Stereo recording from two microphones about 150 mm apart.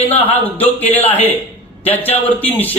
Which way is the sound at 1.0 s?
40° left (ahead or behind).